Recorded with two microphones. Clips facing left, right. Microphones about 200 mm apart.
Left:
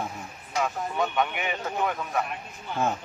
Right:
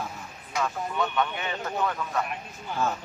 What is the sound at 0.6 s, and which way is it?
Speech, 15° left (ahead or behind).